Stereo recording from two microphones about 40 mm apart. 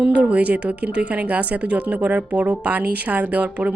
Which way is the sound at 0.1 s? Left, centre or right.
Right.